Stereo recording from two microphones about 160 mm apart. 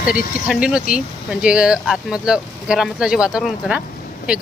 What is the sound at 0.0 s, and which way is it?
Speech, 60° left (ahead or behind).